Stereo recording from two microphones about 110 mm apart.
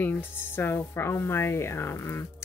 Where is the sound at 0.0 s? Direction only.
20° left (ahead or behind).